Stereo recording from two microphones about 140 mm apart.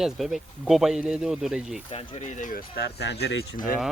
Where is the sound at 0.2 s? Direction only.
Centre (ahead or behind).